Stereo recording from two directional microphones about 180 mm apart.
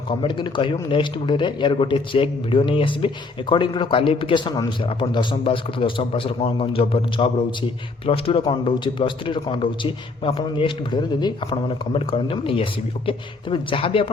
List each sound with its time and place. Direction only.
0.1 s a man's voice: 30° left (ahead or behind)